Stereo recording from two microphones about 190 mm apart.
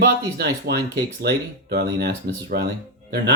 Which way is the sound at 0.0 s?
55° right (ahead or behind).